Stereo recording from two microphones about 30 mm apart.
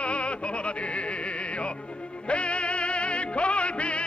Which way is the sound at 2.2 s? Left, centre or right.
Left.